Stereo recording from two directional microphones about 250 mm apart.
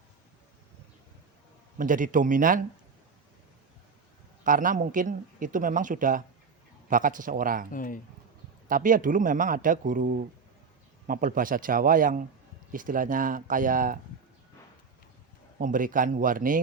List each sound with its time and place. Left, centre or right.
1.8 s a man's voice: right
4.4 s a man's voice: right
7.7 s speech: left
8.6 s a man's voice: right
15.5 s a man's voice: right